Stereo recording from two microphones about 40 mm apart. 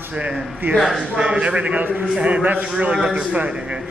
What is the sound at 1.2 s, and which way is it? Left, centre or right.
A man's voice, right.